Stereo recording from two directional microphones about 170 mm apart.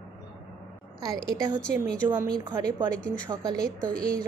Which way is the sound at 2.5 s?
25° right (ahead or behind).